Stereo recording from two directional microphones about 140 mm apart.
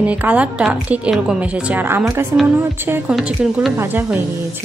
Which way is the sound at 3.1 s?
5° right (ahead or behind).